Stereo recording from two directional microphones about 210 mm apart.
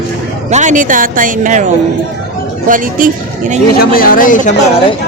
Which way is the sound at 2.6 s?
40° right (ahead or behind).